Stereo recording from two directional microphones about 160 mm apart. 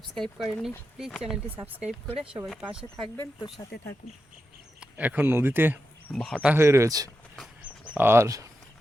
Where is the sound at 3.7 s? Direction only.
75° left (ahead or behind).